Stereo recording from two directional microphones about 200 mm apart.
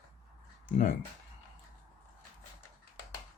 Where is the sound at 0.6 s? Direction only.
40° left (ahead or behind).